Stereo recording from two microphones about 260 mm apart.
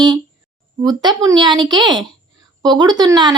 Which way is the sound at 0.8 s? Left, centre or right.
Centre.